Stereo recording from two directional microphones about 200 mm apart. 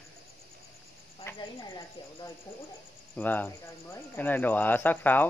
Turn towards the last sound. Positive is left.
turn(degrees=10)  # may be behind; listen again after turning